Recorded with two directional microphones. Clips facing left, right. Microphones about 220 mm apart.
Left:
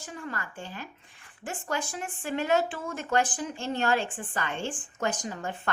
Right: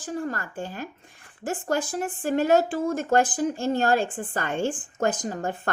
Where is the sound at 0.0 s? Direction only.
40° right (ahead or behind).